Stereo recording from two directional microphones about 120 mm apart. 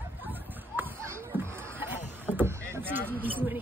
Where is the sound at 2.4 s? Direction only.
20° right (ahead or behind).